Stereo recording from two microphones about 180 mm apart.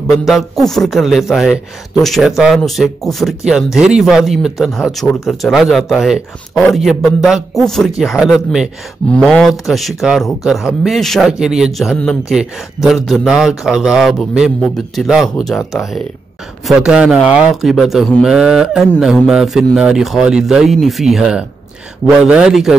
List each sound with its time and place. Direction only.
0.3 s speech: centre (ahead or behind)